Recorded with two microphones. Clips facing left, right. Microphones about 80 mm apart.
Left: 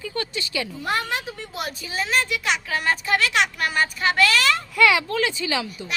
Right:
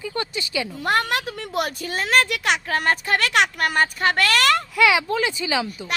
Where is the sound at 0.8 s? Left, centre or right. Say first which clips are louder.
Right 5 dB; right.